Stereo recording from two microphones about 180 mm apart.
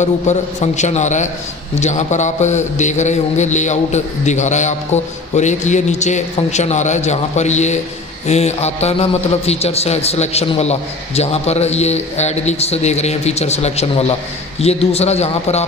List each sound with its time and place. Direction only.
0.0 s a man's voice: 40° left (ahead or behind)